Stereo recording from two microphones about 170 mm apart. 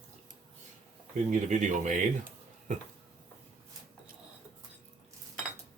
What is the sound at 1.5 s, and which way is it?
Speech, 45° right (ahead or behind).